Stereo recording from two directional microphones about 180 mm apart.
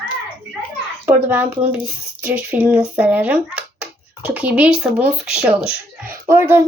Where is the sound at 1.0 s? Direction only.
10° right (ahead or behind).